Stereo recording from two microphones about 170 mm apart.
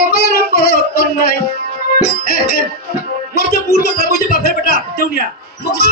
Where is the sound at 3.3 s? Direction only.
65° left (ahead or behind).